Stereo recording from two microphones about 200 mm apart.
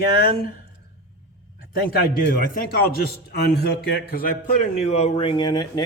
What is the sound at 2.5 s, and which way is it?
A man's voice, 50° left (ahead or behind).